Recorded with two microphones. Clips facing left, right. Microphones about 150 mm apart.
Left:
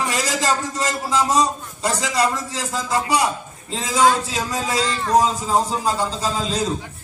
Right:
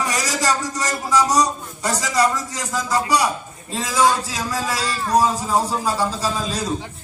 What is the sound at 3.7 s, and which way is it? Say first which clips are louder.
A man's voice: left 1 dB; 20° left (ahead or behind).